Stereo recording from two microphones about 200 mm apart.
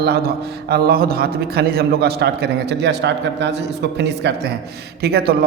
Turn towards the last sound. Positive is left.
turn(degrees=-50)  # may be behind; listen again after turning